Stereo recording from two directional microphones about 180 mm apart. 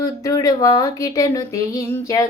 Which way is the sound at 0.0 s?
20° left (ahead or behind).